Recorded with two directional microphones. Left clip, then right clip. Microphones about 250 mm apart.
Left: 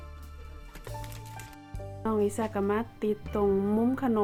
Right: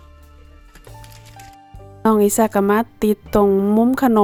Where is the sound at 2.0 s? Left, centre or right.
Right.